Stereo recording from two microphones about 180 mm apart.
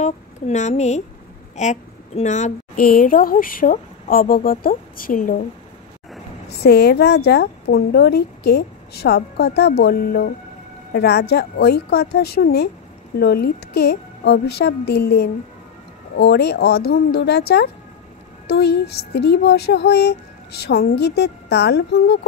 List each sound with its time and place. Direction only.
0.0 s a woman's voice: 40° left (ahead or behind)
6.6 s a woman's voice: 65° left (ahead or behind)